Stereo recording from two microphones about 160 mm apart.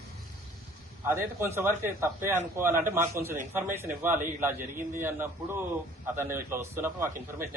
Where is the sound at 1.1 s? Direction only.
15° right (ahead or behind).